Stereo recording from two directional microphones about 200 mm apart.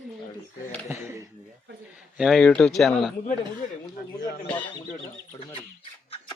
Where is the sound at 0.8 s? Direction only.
10° right (ahead or behind).